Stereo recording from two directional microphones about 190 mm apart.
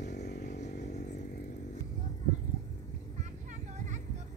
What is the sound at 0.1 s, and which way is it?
Chainsaw, 60° left (ahead or behind).